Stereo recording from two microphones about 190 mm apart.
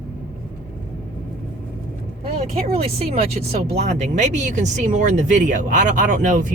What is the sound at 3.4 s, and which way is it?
Speech, 40° right (ahead or behind).